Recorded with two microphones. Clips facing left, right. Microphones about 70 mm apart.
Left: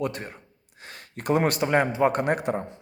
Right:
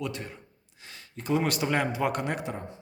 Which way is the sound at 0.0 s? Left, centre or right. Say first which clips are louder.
Left 5 dB; left.